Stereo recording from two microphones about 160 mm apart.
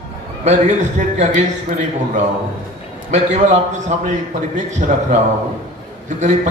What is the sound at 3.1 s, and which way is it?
A man's voice, 50° right (ahead or behind).